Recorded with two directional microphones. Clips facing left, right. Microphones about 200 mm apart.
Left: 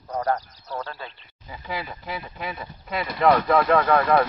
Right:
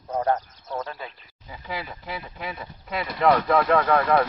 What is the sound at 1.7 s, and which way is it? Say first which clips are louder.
Speech: left 1 dB; 45° left (ahead or behind).